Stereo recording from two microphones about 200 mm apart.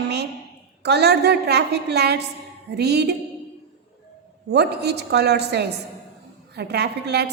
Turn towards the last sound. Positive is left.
turn(degrees=-55)  # may be behind; listen again after turning